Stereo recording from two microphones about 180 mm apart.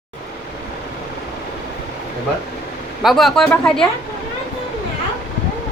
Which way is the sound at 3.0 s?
Centre (ahead or behind).